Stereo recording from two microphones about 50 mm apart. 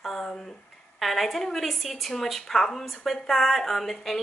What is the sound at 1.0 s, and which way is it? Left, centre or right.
Speech, centre.